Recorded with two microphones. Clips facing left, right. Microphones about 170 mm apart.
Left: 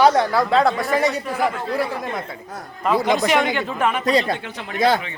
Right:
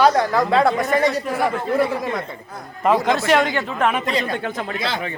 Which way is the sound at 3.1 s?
15° left (ahead or behind).